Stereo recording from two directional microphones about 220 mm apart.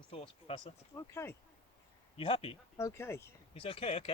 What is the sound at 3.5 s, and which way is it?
Speech, 25° left (ahead or behind).